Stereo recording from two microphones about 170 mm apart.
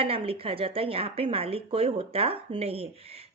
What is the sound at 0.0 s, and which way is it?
A woman's voice, 35° right (ahead or behind).